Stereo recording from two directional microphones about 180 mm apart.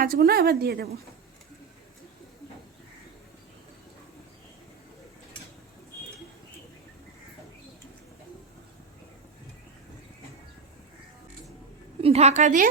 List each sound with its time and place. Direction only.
0.0 s a woman's voice: 55° right (ahead or behind)
12.0 s a woman's voice: 35° right (ahead or behind)